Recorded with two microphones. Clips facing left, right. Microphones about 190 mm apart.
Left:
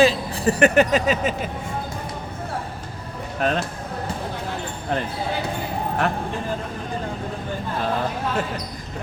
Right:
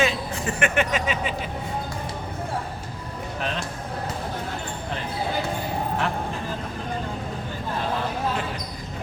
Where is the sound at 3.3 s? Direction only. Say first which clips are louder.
Left 8 dB; 50° left (ahead or behind).